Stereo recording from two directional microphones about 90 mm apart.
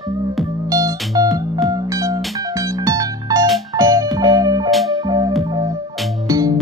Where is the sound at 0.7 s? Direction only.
40° right (ahead or behind).